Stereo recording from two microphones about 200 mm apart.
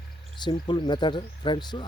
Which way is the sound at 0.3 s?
20° left (ahead or behind).